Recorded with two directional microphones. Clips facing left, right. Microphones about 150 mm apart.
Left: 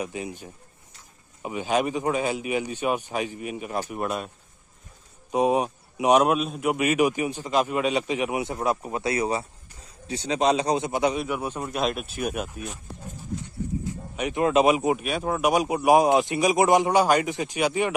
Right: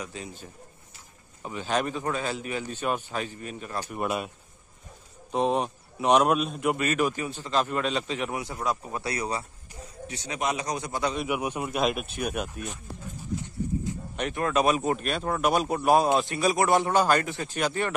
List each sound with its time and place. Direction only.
0.0 s a man's voice: 15° left (ahead or behind)
3.9 s speech: 5° right (ahead or behind)
5.3 s a man's voice: 10° left (ahead or behind)
11.2 s a man's voice: 10° right (ahead or behind)
11.7 s speech: centre (ahead or behind)
14.1 s a man's voice: 10° left (ahead or behind)